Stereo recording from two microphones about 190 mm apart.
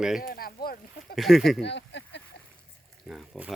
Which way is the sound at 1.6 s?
65° left (ahead or behind).